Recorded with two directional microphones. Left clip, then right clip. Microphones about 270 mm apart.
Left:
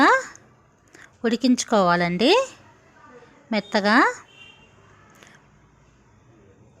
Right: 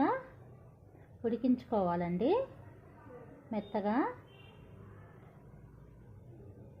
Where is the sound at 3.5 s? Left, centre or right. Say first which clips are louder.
Left 15 dB; left.